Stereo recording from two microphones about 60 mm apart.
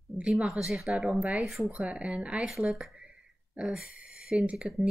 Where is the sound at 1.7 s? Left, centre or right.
Right.